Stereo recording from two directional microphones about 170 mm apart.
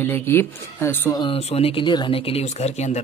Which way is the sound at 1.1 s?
35° left (ahead or behind).